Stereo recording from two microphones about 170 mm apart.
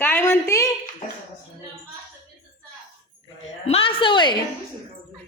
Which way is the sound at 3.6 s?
35° left (ahead or behind).